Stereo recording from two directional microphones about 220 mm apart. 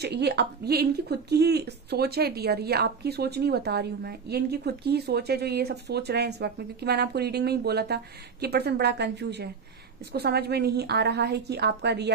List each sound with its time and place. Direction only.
0.0 s speech: 50° right (ahead or behind)